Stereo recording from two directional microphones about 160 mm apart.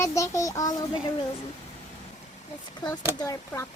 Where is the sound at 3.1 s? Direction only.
20° left (ahead or behind).